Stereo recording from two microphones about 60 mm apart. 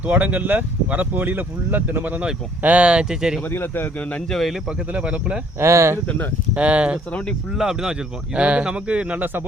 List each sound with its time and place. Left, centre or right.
0.0 s speech: right; by 3.4 s centre
3.5 s speech: left
4.3 s speech: centre
4.9 s speech: right
5.5 s speech: right
6.5 s speech: right
7.5 s speech: centre; by 9.4 s right